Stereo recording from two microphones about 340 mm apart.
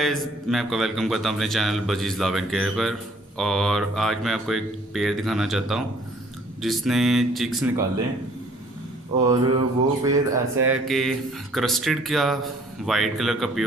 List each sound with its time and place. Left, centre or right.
0.0 s speech: centre
9.2 s a sound: centre
10.0 s speech: centre